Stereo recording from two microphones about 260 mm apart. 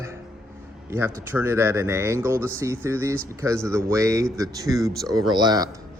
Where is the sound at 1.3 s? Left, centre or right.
Centre.